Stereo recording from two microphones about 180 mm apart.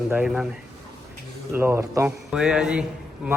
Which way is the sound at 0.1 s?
5° right (ahead or behind).